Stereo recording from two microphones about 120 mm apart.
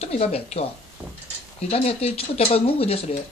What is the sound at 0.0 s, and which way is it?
Speech, 60° left (ahead or behind).